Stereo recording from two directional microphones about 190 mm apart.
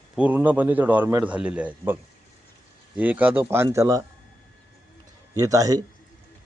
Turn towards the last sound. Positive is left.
turn(degrees=-20)  # may be behind; listen again after turning